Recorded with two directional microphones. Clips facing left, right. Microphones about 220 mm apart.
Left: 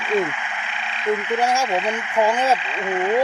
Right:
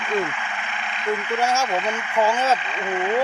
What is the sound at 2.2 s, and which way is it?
Speech, 15° left (ahead or behind).